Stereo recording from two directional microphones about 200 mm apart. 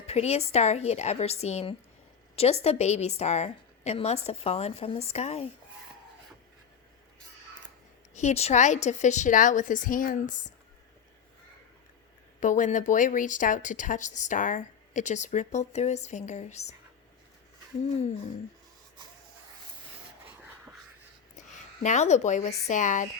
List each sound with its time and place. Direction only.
0.1 s speech: 30° left (ahead or behind)
8.1 s speech: 35° left (ahead or behind)
12.4 s speech: 40° left (ahead or behind)
21.8 s speech: 35° left (ahead or behind)